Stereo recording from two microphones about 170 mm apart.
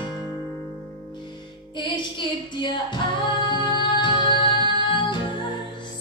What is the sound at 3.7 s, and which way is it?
Music, 30° left (ahead or behind).